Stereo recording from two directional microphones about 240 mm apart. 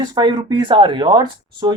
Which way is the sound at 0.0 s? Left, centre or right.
Centre.